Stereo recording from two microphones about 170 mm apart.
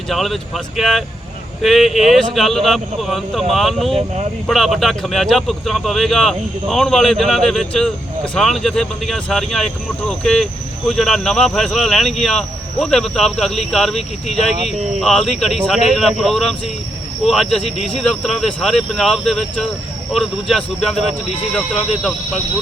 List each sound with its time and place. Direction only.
0.1 s speech: centre (ahead or behind)
17.6 s speech: 35° left (ahead or behind)
18.0 s speech: centre (ahead or behind)